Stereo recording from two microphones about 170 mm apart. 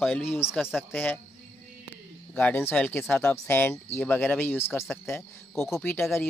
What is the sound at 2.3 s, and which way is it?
Speech, 10° left (ahead or behind).